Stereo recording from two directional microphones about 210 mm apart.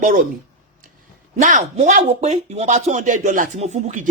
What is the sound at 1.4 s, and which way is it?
Speech, 35° right (ahead or behind).